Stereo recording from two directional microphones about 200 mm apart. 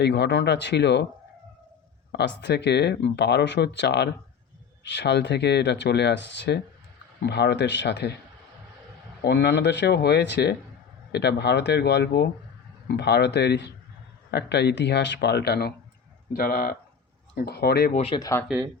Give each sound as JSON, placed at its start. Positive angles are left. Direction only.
{"t": 0.0, "sound": "speech", "side_deg": 55}
{"t": 2.1, "sound": "speech", "side_deg": 60}
{"t": 9.2, "sound": "speech", "side_deg": 60}
{"t": 17.9, "sound": "speech", "side_deg": 30}
{"t": 18.2, "sound": "speech", "side_deg": 15}